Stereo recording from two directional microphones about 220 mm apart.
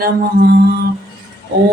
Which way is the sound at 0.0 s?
45° right (ahead or behind).